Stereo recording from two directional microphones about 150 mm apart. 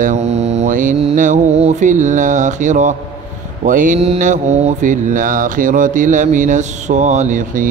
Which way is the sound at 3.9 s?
40° right (ahead or behind).